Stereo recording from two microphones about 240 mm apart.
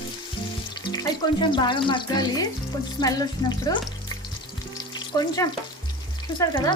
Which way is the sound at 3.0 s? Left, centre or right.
Centre.